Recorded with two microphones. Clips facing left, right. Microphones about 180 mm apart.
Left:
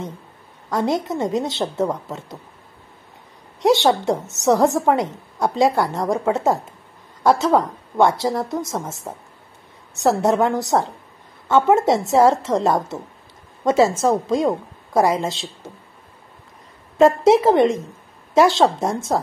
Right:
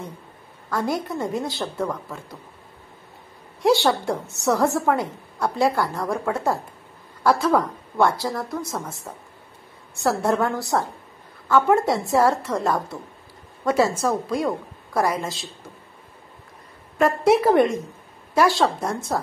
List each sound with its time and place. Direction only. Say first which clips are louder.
0.7 s a woman's voice: left 4 dB; 20° left (ahead or behind)
3.6 s a woman's voice: left 3 dB; 20° left (ahead or behind)
17.0 s a woman's voice: left 4 dB; 25° left (ahead or behind)